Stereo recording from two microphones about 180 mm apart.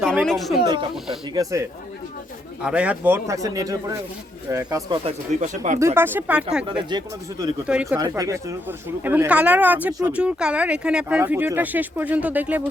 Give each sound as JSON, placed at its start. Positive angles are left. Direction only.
{"t": 0.0, "sound": "speech", "side_deg": 0}
{"t": 0.6, "sound": "speech", "side_deg": -25}
{"t": 2.6, "sound": "speech", "side_deg": -5}
{"t": 5.0, "sound": "speech", "side_deg": -40}
{"t": 5.8, "sound": "speech", "side_deg": -15}
{"t": 6.9, "sound": "speech", "side_deg": -20}
{"t": 7.7, "sound": "speech", "side_deg": -5}
{"t": 7.9, "sound": "speech", "side_deg": -20}